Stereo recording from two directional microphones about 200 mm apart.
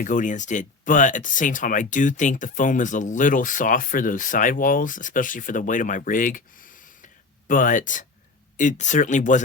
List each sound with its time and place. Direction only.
0.0 s speech: 40° left (ahead or behind)